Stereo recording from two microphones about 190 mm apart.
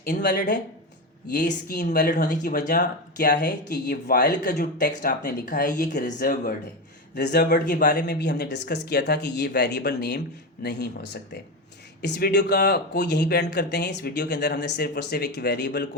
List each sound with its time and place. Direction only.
0.0 s speech: 60° left (ahead or behind)
2.3 s speech: 45° left (ahead or behind)
7.2 s speech: 60° left (ahead or behind)
7.7 s speech: 45° left (ahead or behind)
8.0 s speech: 60° left (ahead or behind)